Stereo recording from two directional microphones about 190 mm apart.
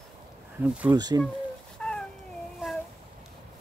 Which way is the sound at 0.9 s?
20° right (ahead or behind).